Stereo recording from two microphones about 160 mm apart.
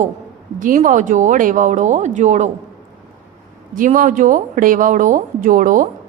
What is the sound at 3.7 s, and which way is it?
A woman's voice, 55° right (ahead or behind).